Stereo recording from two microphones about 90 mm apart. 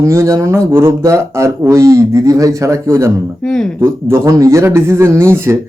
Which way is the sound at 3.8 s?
25° right (ahead or behind).